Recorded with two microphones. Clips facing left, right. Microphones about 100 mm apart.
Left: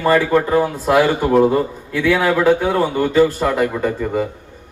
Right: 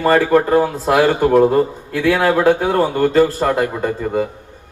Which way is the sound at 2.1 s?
30° right (ahead or behind).